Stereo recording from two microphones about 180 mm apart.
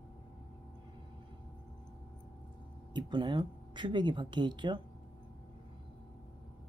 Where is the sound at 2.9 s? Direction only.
25° right (ahead or behind).